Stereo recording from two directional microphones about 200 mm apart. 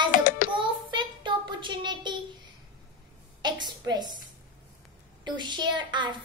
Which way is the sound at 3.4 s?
20° right (ahead or behind).